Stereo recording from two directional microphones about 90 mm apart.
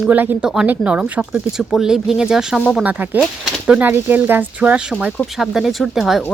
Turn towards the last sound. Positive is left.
turn(degrees=0)  # may be behind; listen again after turning